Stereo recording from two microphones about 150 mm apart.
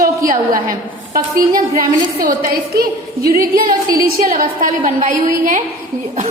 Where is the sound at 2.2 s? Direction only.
70° right (ahead or behind); by 3.4 s 85° right.